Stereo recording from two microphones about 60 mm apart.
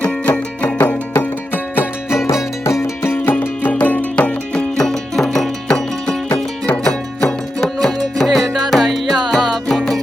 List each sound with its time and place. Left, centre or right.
0.0 s music: left
3.4 s music: left
4.8 s music: centre